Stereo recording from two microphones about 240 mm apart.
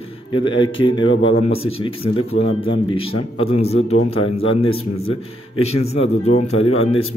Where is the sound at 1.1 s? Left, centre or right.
Left.